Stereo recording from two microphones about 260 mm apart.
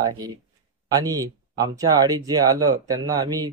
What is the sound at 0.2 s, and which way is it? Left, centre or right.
Speech, centre.